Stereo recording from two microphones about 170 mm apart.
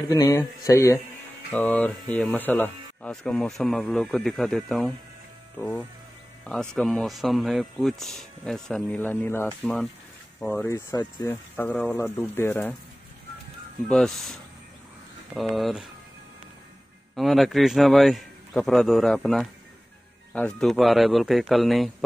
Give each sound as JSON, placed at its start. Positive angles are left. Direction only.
{"t": 0.1, "sound": "speech", "side_deg": 20}
{"t": 11.5, "sound": "speech", "side_deg": 10}
{"t": 13.8, "sound": "speech", "side_deg": 0}
{"t": 17.1, "sound": "speech", "side_deg": 0}